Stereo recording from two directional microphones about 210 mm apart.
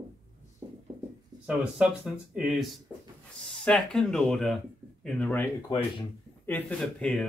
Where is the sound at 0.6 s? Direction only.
20° right (ahead or behind).